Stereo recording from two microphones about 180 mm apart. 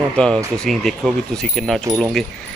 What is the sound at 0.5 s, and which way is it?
Speech, centre (ahead or behind).